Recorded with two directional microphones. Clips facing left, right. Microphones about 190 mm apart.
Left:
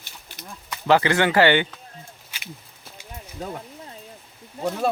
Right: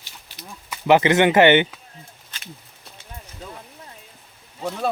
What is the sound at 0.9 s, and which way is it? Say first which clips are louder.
Speech: right 3 dB; 20° right (ahead or behind).